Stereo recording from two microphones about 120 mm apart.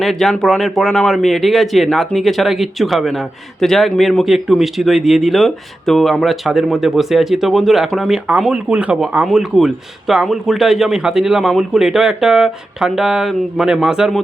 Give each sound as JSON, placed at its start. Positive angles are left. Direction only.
{"t": 0.0, "sound": "a man's voice", "side_deg": 0}